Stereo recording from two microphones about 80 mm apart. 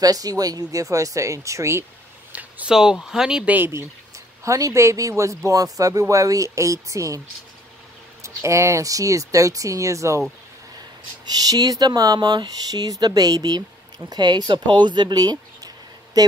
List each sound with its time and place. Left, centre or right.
0.0 s speech: right
2.3 s a sound: centre
2.7 s speech: centre
3.4 s speech: right
4.5 s speech: right
8.2 s speech: right
11.2 s speech: right